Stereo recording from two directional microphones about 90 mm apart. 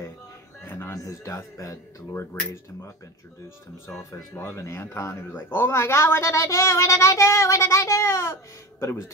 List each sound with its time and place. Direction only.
0.7 s music: 25° left (ahead or behind)
0.9 s a man's voice: 35° left (ahead or behind)
4.1 s a man's voice: 25° left (ahead or behind)